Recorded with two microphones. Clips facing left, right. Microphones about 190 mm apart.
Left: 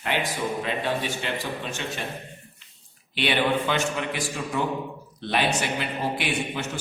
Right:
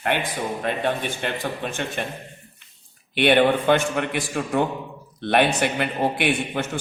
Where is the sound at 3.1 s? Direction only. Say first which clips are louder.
Right 6 dB; 55° right (ahead or behind).